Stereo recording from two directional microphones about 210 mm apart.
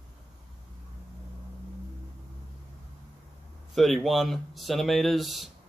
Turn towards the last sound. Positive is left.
turn(degrees=0)  # may be behind; listen again after turning